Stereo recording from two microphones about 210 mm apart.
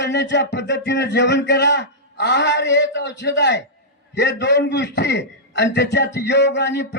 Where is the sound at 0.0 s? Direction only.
55° left (ahead or behind).